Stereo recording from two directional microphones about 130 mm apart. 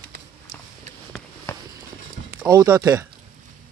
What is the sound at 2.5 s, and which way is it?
Speech, 30° right (ahead or behind).